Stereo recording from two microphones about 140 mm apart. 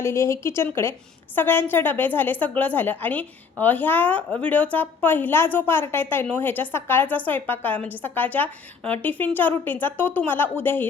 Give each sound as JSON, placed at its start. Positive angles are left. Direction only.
{"t": 0.0, "sound": "a woman's voice", "side_deg": 20}